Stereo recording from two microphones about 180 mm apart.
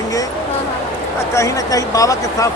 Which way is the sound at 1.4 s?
20° left (ahead or behind).